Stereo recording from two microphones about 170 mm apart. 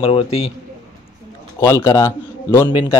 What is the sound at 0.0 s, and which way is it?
Speech, 35° left (ahead or behind).